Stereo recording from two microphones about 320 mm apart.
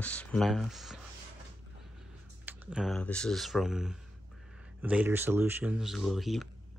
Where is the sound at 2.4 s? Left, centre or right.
Centre.